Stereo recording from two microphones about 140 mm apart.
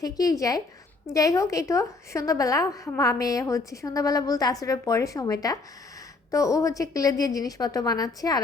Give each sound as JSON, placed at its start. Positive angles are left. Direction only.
{"t": 0.0, "sound": "a woman's voice", "side_deg": 25}